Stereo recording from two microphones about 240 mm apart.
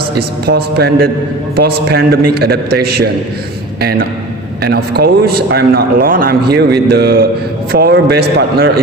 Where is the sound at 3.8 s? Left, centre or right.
Right.